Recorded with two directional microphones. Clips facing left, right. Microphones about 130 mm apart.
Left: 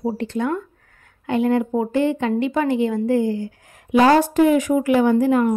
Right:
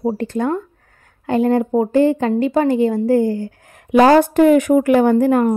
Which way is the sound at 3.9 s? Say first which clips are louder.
Right 3 dB; 50° right (ahead or behind).